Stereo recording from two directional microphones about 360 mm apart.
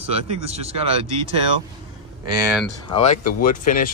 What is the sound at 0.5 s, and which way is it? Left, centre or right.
Speech, centre.